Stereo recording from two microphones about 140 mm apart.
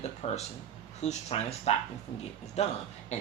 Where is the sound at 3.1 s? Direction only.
55° left (ahead or behind).